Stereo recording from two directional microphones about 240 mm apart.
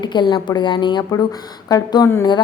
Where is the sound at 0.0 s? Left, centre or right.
Centre.